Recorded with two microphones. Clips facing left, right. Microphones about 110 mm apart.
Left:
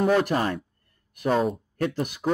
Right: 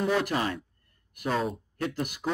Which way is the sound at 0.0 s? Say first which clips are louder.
Left 5 dB; 50° left (ahead or behind).